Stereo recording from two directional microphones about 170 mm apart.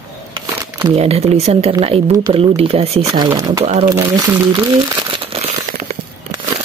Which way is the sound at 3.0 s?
20° right (ahead or behind).